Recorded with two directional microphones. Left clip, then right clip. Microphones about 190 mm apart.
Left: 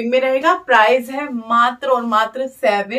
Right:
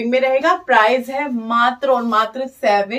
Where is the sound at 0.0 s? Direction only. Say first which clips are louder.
Even; 20° left (ahead or behind).